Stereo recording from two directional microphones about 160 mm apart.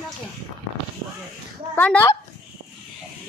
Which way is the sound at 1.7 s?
10° left (ahead or behind).